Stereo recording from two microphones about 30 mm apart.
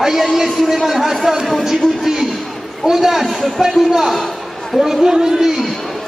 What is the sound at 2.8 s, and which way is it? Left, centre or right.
Speech, centre.